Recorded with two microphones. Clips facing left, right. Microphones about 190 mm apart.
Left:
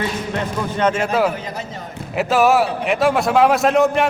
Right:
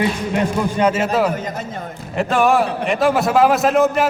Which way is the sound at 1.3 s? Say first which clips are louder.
Right 3 dB; 45° right (ahead or behind).